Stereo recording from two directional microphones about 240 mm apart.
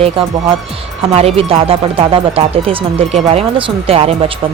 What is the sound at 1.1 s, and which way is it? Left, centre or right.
Speech, right.